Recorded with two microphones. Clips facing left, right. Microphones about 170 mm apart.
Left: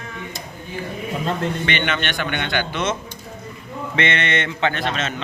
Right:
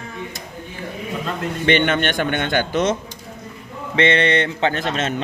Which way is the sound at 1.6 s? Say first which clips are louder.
Right 6 dB; 50° right (ahead or behind).